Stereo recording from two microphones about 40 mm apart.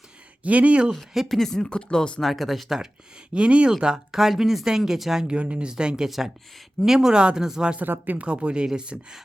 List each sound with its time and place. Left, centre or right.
0.4 s speech: right
1.3 s speech: centre
1.6 s speech: left
2.2 s speech: centre
3.3 s speech: right; by 5.2 s centre
5.3 s speech: right
6.1 s speech: centre; by 7.4 s right
7.8 s speech: right
8.2 s speech: right